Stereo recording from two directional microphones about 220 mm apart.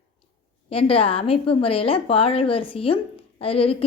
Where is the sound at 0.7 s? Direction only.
25° left (ahead or behind).